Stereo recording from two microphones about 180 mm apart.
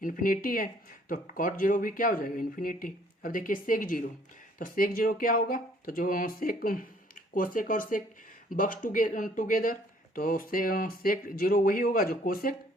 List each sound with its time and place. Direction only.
0.0 s speech: 50° left (ahead or behind)